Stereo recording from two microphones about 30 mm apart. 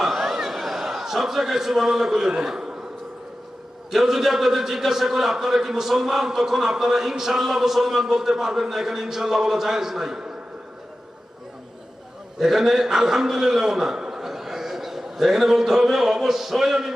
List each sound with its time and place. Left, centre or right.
0.0 s a sound: centre
0.4 s a man's voice: centre
3.9 s a man's voice: centre
12.4 s a man's voice: centre